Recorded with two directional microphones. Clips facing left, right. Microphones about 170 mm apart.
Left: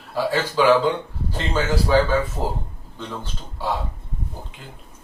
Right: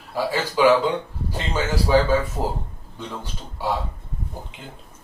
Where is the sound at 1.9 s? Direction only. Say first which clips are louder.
Even; 15° right (ahead or behind).